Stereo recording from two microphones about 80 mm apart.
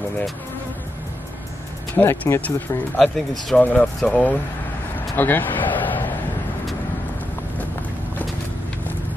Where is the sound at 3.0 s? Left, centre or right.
Centre.